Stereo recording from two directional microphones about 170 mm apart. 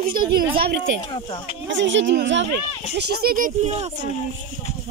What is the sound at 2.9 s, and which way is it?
Speech, 75° right (ahead or behind).